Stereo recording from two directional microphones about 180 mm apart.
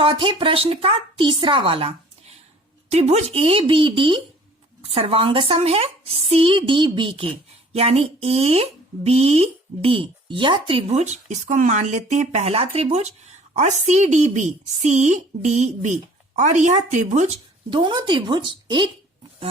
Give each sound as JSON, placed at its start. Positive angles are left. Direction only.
{"t": 0.0, "sound": "speech", "side_deg": -30}
{"t": 17.7, "sound": "speech", "side_deg": -25}